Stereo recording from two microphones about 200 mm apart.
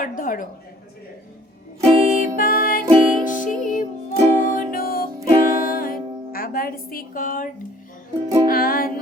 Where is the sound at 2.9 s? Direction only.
25° right (ahead or behind).